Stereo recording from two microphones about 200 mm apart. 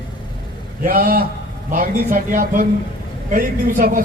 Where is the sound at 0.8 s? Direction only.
45° right (ahead or behind).